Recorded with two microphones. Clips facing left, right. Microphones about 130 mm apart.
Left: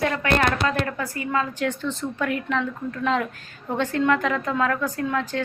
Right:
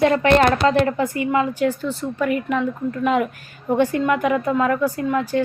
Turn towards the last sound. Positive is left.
turn(degrees=-10)  # may be behind; listen again after turning